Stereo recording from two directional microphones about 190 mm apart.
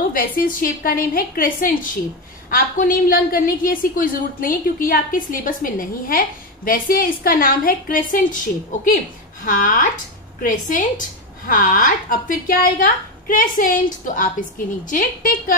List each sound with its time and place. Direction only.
0.1 s a woman's voice: 50° left (ahead or behind)
9.4 s a woman's voice: 45° left (ahead or behind)